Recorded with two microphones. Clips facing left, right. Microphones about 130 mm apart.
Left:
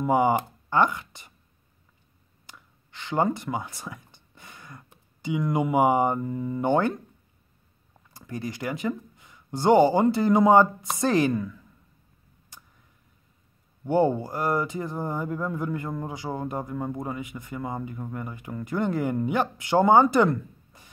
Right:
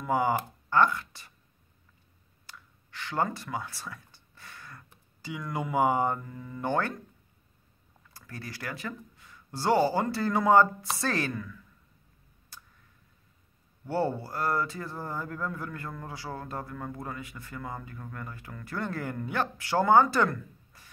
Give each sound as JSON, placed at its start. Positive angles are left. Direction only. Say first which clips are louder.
{"t": 0.0, "sound": "speech", "louder": "left 5 dB", "side_deg": 20}
{"t": 2.4, "sound": "speech", "louder": "even", "side_deg": 20}
{"t": 8.1, "sound": "speech", "louder": "left 9 dB", "side_deg": 20}
{"t": 12.5, "sound": "a sound", "louder": "even", "side_deg": 20}
{"t": 13.8, "sound": "speech", "louder": "left 7 dB", "side_deg": 15}